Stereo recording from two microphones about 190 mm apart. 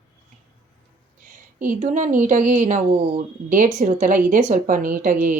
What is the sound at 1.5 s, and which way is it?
A woman's voice, 45° right (ahead or behind).